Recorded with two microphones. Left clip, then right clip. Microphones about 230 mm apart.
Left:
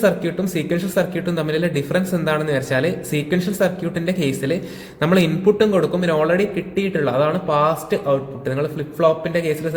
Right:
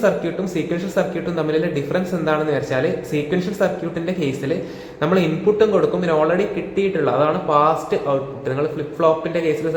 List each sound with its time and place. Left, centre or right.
0.5 s a man's voice: left